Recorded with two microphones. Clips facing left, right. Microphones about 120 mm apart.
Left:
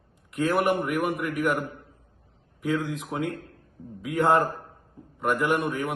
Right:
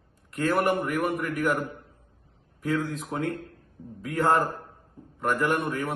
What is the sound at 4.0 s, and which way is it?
Speech, 15° left (ahead or behind).